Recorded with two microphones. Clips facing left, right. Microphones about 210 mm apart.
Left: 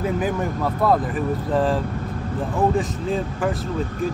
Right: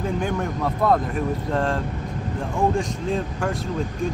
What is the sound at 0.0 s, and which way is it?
Speech, 5° left (ahead or behind).